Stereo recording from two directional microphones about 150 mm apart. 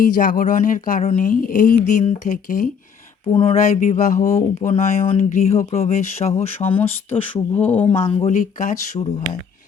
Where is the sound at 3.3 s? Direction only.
40° left (ahead or behind).